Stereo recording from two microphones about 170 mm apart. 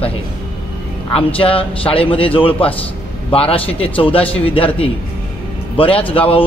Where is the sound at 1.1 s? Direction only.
35° left (ahead or behind).